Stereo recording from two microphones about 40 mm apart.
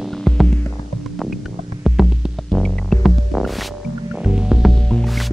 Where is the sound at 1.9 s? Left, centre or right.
Centre.